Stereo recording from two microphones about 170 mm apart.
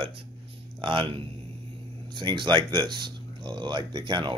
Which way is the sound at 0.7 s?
30° right (ahead or behind).